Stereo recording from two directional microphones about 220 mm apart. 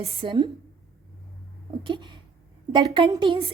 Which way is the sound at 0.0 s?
25° right (ahead or behind).